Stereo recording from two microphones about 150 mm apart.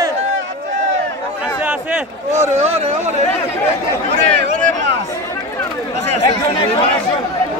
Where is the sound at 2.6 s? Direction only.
45° right (ahead or behind).